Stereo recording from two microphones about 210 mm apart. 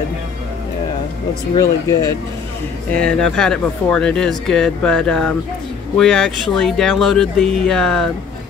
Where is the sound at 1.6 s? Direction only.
15° left (ahead or behind).